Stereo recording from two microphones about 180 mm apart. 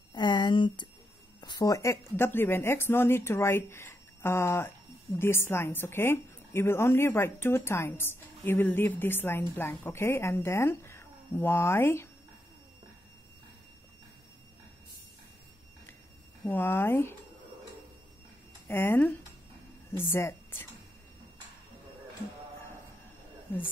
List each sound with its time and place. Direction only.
0.1 s a sound: 25° left (ahead or behind)
1.4 s a woman's voice: 20° left (ahead or behind)
16.4 s a woman's voice: 10° left (ahead or behind)
18.7 s a woman's voice: 10° left (ahead or behind)